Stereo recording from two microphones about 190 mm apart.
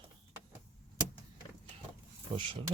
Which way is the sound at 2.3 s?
25° right (ahead or behind).